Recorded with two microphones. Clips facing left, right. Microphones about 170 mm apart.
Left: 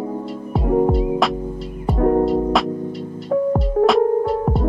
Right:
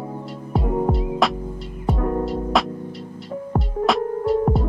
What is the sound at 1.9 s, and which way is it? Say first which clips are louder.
Music: left 9 dB; 45° left (ahead or behind).